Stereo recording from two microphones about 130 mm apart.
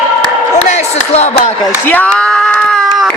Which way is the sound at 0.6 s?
60° left (ahead or behind).